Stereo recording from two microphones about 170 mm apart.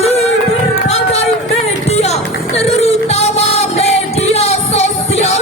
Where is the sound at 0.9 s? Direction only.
40° left (ahead or behind).